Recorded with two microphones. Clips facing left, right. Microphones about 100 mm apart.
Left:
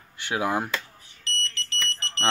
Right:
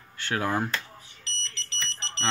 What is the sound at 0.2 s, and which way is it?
Speech, 15° left (ahead or behind).